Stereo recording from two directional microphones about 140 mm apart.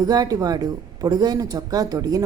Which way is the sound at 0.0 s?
25° right (ahead or behind).